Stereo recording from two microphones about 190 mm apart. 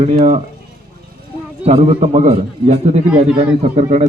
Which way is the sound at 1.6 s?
30° right (ahead or behind).